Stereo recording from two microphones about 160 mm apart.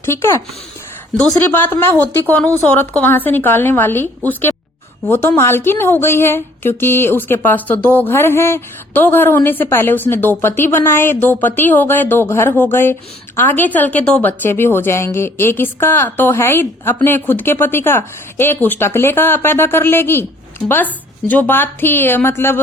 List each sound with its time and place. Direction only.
0.0 s a woman's voice: 15° left (ahead or behind)